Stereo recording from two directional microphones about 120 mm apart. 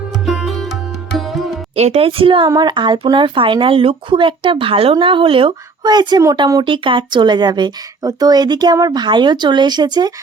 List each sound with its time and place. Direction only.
0.3 s music: centre (ahead or behind)
1.7 s speech: 60° right (ahead or behind)
5.8 s speech: 35° right (ahead or behind)